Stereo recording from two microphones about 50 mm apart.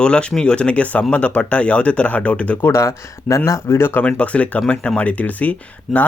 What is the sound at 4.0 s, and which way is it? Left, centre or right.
Speech, left.